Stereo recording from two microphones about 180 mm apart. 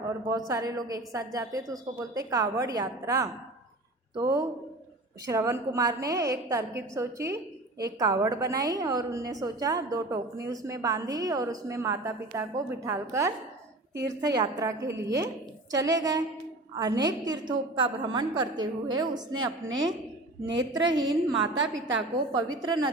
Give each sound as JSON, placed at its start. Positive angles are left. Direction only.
{"t": 0.3, "sound": "a woman's voice", "side_deg": -20}
{"t": 19.6, "sound": "a woman's voice", "side_deg": -90}
{"t": 20.9, "sound": "a woman's voice", "side_deg": -25}
{"t": 21.4, "sound": "a woman's voice", "side_deg": -90}
{"t": 22.3, "sound": "a woman's voice", "side_deg": -25}